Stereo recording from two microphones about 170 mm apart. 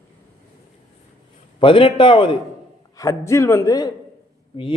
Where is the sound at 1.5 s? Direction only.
30° left (ahead or behind).